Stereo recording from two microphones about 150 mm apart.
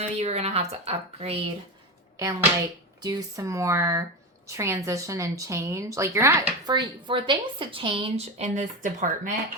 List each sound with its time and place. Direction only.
0.0 s a woman's voice: 45° right (ahead or behind)
2.1 s a woman's voice: 20° right (ahead or behind)
6.7 s a woman's voice: 30° right (ahead or behind)
8.2 s speech: 50° right (ahead or behind)